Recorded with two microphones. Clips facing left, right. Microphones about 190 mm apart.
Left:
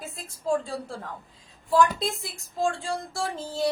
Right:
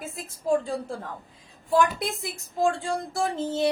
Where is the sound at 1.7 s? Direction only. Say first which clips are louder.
Left 1 dB; 20° right (ahead or behind).